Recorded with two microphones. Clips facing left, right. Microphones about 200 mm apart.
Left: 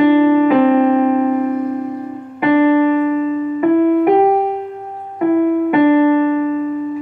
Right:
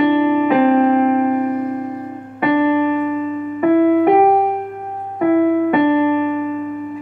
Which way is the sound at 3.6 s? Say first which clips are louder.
Even; centre (ahead or behind).